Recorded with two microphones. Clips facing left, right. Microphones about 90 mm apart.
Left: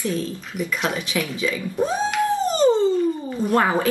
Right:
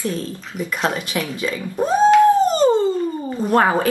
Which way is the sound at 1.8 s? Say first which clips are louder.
Right 10 dB; 45° right (ahead or behind).